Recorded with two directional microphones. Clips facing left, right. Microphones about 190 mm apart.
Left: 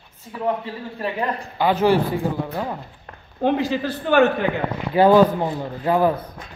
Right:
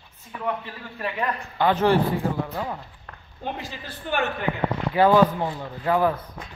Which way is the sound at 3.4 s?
90° left.